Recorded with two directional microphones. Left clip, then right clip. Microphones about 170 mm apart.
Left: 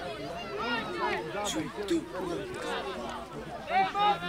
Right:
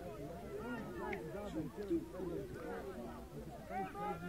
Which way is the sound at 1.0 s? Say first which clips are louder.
Left 11 dB; 10° right (ahead or behind).